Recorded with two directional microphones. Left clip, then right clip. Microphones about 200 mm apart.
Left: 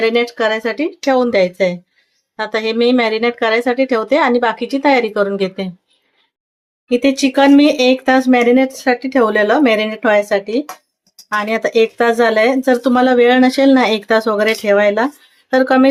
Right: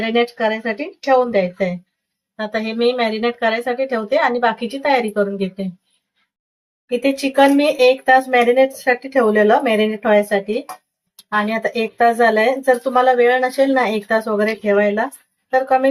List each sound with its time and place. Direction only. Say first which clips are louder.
0.0 s speech: left 3 dB; 50° left (ahead or behind)
6.9 s speech: left 3 dB; 55° left (ahead or behind)